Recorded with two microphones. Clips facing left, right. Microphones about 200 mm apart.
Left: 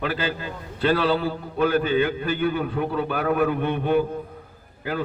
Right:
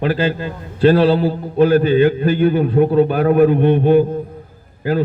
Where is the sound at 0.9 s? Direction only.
30° right (ahead or behind).